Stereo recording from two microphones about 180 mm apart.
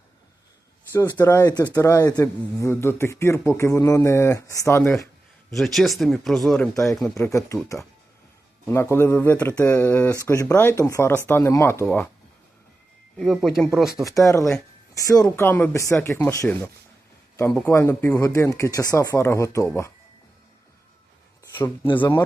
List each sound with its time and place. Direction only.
0.9 s speech: 15° left (ahead or behind)
5.5 s speech: centre (ahead or behind)
6.7 s speech: 15° left (ahead or behind)
13.1 s speech: centre (ahead or behind)
14.1 s speech: 20° left (ahead or behind)
21.9 s speech: 10° left (ahead or behind)